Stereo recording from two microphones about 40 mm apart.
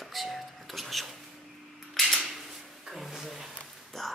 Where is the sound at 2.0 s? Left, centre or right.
Centre.